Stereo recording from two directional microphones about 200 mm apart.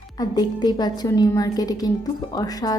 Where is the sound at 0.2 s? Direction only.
20° left (ahead or behind).